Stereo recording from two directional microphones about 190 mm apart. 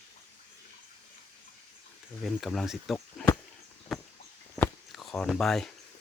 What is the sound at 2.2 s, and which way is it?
Speech, centre (ahead or behind).